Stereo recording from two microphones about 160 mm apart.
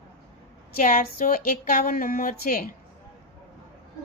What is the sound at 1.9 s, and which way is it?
Speech, 70° left (ahead or behind).